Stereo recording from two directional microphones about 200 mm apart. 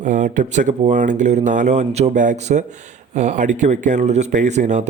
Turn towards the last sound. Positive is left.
turn(degrees=-35)  # may be behind; listen again after turning